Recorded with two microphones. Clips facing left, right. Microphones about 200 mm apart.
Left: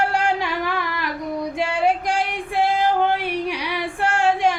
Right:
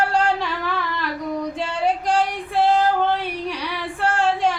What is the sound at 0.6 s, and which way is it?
Humming, 10° left (ahead or behind).